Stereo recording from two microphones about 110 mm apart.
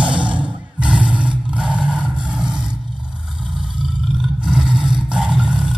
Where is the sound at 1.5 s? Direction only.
10° right (ahead or behind).